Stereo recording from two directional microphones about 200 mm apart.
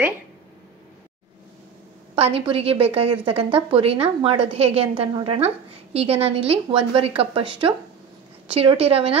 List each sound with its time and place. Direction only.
2.1 s a woman's voice: 30° right (ahead or behind)